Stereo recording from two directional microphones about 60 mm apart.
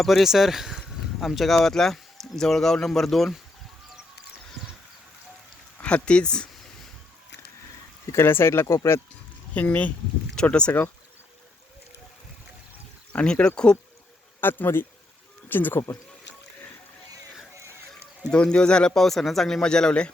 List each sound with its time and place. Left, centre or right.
0.0 s speech: centre
5.8 s speech: centre
8.1 s speech: left
9.6 s speech: left
13.1 s speech: centre
14.4 s speech: left
18.3 s speech: centre